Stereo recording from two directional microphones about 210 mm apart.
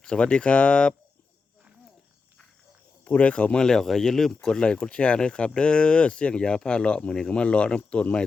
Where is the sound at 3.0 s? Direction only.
5° left (ahead or behind).